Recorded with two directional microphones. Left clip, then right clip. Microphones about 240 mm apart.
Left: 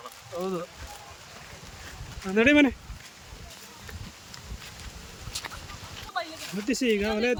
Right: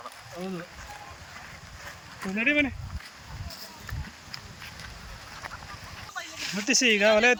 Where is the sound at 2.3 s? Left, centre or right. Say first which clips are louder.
Left 5 dB; centre.